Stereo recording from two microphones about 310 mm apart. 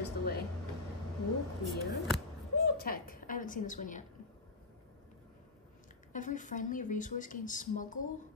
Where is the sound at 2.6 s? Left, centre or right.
Left.